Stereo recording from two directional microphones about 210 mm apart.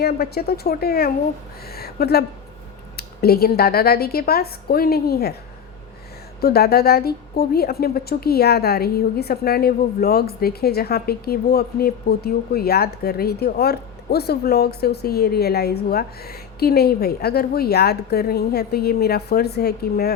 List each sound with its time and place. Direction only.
0.0 s a woman's voice: 50° left (ahead or behind)
6.4 s a woman's voice: 50° left (ahead or behind)